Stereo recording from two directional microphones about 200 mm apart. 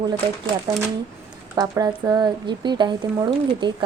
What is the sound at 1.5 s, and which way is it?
Speech, 20° right (ahead or behind).